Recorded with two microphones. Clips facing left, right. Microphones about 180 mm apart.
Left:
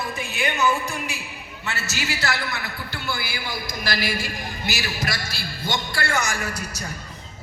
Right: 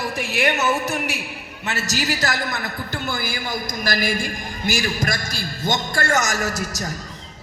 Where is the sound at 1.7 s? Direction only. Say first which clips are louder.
Right 5 dB; 40° right (ahead or behind).